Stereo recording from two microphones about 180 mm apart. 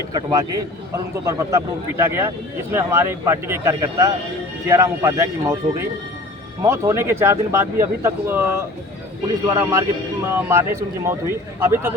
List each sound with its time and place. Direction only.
0.1 s speech: 20° right (ahead or behind)